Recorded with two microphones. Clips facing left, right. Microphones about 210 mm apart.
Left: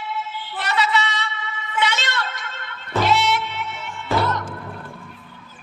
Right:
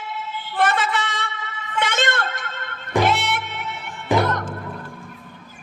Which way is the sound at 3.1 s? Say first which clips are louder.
Left 3 dB; 50° right (ahead or behind).